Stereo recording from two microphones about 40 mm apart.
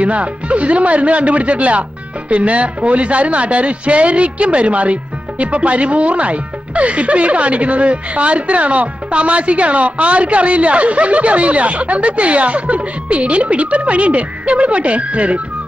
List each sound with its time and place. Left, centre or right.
0.0 s speech: right